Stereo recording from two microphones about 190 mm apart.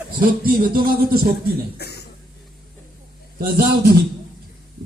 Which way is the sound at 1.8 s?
60° left (ahead or behind).